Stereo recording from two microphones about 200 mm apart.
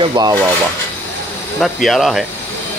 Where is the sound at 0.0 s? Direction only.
20° right (ahead or behind).